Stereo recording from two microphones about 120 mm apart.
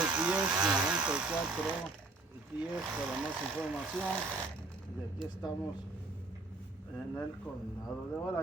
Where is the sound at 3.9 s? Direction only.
5° right (ahead or behind).